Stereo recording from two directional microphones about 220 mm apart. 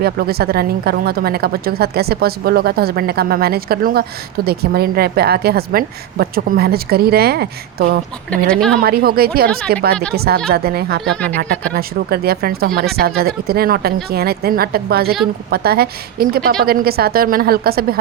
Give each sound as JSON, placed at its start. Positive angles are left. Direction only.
{"t": 0.0, "sound": "a woman's voice", "side_deg": -45}
{"t": 8.3, "sound": "speech", "side_deg": 5}
{"t": 8.8, "sound": "a woman's voice", "side_deg": -45}
{"t": 11.0, "sound": "speech", "side_deg": 5}
{"t": 11.3, "sound": "a woman's voice", "side_deg": -45}